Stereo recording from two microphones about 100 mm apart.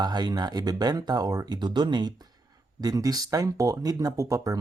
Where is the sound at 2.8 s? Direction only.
40° right (ahead or behind).